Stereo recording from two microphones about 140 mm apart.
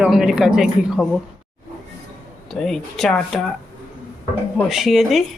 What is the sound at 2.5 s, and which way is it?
Speech, centre (ahead or behind).